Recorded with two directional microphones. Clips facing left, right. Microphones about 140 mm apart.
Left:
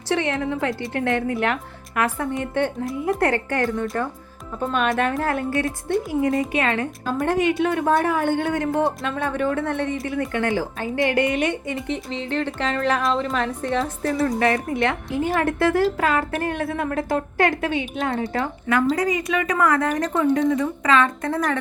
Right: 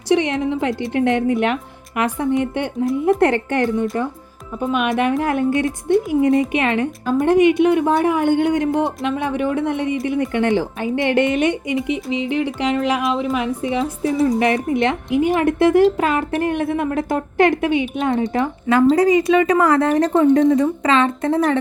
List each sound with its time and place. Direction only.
0.1 s a woman's voice: 20° right (ahead or behind)